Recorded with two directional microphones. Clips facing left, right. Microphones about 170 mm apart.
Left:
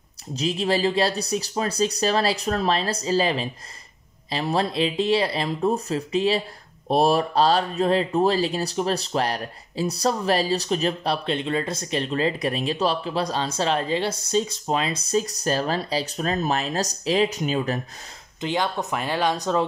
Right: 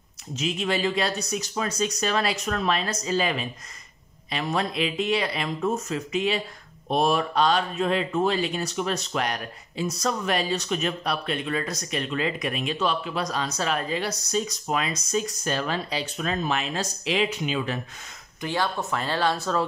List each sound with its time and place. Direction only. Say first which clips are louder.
0.4 s speech: left 3 dB; 35° left (ahead or behind)
18.4 s speech: left 2 dB; 20° left (ahead or behind)